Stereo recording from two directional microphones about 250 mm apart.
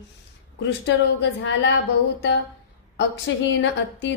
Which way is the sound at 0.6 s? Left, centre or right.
Left.